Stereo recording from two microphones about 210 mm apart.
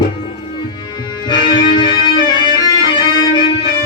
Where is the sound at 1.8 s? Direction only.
20° left (ahead or behind).